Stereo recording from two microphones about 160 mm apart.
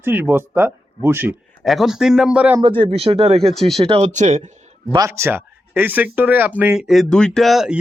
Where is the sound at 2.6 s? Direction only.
30° right (ahead or behind).